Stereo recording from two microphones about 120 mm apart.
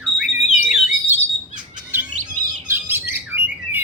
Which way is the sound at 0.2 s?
10° right (ahead or behind).